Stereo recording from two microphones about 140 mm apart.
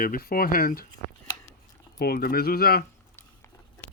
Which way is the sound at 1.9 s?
90° left.